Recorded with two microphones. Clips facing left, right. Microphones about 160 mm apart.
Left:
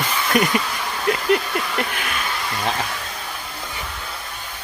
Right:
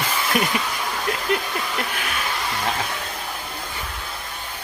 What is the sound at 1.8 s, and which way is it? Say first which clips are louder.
Speech: left 2 dB; centre (ahead or behind).